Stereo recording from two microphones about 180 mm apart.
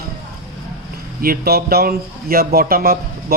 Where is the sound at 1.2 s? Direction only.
55° right (ahead or behind).